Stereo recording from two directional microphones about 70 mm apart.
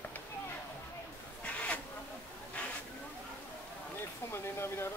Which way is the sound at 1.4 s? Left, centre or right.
Left.